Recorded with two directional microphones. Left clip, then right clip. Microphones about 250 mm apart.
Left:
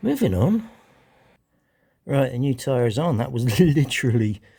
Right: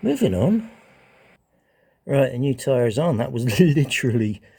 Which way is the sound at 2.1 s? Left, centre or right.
Left.